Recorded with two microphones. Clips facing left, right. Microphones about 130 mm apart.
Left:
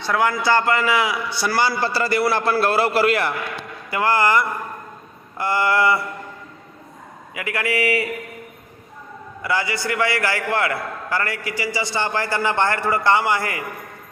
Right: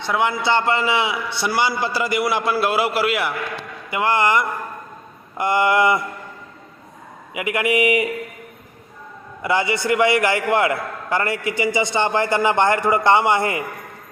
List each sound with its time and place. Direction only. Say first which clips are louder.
0.0 s a man's voice: even; 20° right (ahead or behind)
3.8 s a man's voice: even; 20° right (ahead or behind)
7.3 s a man's voice: right 4 dB; 20° right (ahead or behind)
9.4 s a man's voice: right 3 dB; 20° right (ahead or behind)